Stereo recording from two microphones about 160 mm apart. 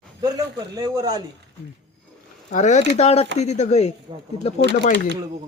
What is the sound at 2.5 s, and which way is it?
Speech, 50° left (ahead or behind).